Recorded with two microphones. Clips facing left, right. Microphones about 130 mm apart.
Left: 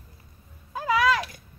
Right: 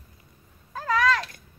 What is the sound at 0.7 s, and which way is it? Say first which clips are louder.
Cat: left 1 dB; 10° left (ahead or behind).